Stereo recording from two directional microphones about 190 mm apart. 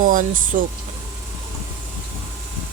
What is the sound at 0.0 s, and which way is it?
Speech, 45° right (ahead or behind).